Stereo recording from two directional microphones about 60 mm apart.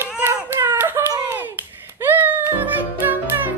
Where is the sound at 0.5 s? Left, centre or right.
Right.